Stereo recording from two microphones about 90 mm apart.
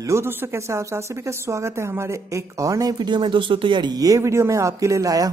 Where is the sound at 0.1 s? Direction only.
30° right (ahead or behind).